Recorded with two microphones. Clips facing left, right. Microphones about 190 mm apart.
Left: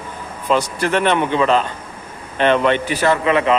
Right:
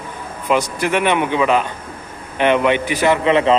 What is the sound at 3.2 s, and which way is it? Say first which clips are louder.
Speech: right 2 dB; 30° right (ahead or behind).